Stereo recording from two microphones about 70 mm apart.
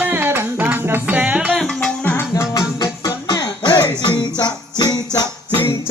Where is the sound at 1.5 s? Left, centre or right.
Centre.